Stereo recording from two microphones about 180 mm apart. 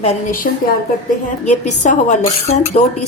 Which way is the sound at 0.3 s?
50° left (ahead or behind).